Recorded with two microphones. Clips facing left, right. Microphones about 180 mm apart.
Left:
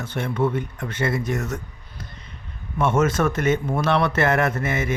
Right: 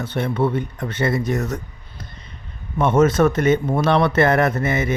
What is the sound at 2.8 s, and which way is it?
Speech, 35° right (ahead or behind).